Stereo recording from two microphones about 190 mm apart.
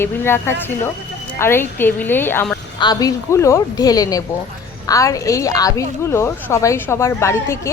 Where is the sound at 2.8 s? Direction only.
20° left (ahead or behind).